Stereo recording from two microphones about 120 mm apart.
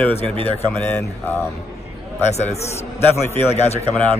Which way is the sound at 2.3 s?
65° left (ahead or behind).